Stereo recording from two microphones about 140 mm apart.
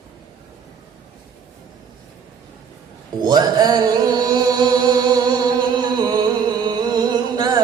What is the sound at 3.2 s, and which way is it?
Music, 30° right (ahead or behind).